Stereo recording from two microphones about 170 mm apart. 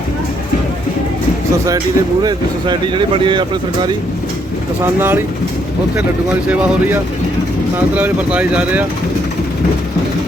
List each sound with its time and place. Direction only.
2.2 s speech: 25° right (ahead or behind)
4.9 s speech: 10° right (ahead or behind)
7.9 s speech: 10° right (ahead or behind)